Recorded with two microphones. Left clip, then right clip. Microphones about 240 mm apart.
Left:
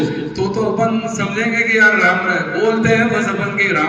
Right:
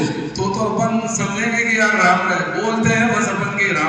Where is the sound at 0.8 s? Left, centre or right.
Centre.